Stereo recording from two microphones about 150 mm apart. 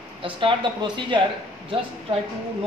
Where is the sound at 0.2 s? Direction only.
35° right (ahead or behind).